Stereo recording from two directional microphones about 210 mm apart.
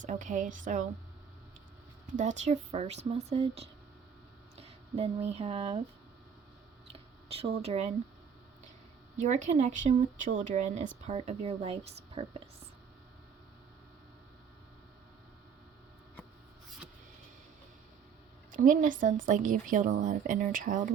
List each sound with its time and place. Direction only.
0.0 s speech: 35° right (ahead or behind)
2.1 s speech: 35° right (ahead or behind)
6.8 s scissors: 30° right (ahead or behind)
9.1 s speech: 35° right (ahead or behind)
18.5 s speech: 40° right (ahead or behind)